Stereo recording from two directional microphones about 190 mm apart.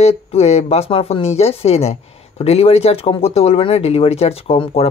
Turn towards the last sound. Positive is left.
turn(degrees=30)  # may be behind; listen again after turning